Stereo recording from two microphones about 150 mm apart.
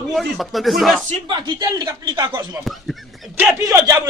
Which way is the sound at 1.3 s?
30° right (ahead or behind).